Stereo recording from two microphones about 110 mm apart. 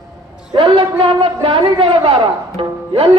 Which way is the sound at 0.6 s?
55° right (ahead or behind).